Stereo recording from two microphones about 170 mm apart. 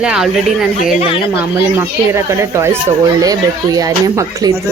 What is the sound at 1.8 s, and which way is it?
Speech, 15° right (ahead or behind).